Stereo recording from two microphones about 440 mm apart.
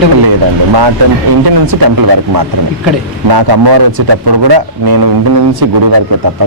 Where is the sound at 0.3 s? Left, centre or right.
Right.